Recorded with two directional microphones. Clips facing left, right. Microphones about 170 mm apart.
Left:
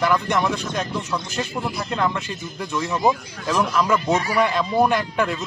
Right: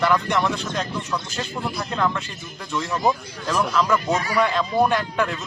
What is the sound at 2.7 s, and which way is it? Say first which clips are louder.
A man's voice: left 1 dB; 15° left (ahead or behind).